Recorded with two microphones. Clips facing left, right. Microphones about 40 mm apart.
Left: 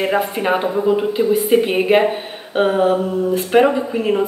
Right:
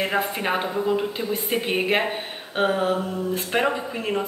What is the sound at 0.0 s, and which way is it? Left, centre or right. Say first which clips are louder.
A woman's voice: left 6 dB; centre.